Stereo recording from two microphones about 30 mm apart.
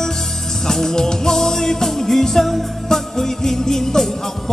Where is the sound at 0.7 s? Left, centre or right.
Centre.